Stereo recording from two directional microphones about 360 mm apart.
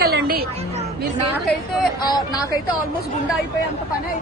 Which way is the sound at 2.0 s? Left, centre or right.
Centre.